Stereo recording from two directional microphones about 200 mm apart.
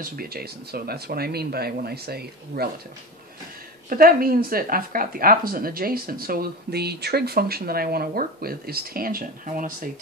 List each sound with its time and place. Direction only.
0.0 s speech: 45° right (ahead or behind)
3.9 s speech: 45° right (ahead or behind)